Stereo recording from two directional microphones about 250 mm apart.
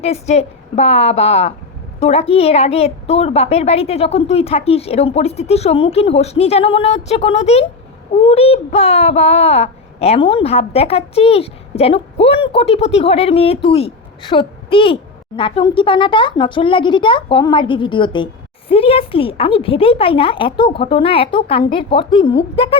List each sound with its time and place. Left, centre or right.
0.0 s a child's voice: left